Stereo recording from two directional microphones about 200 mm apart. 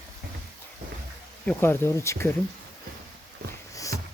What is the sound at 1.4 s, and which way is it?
Speech, 10° left (ahead or behind).